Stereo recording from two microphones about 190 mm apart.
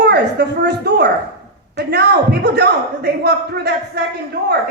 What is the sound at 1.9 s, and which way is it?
A woman's voice, 60° right (ahead or behind).